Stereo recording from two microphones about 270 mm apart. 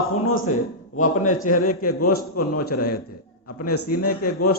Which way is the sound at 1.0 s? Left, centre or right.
Left.